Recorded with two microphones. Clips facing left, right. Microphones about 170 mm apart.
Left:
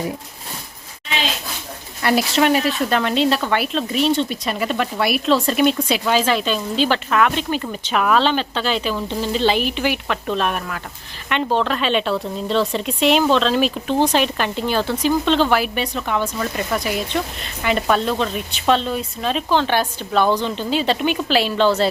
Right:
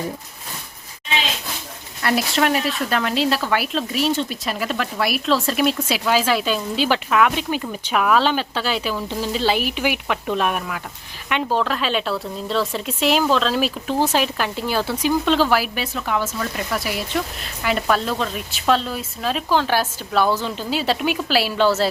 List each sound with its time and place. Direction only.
2.0 s speech: centre (ahead or behind)